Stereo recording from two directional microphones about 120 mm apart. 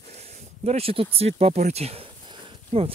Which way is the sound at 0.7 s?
55° right (ahead or behind).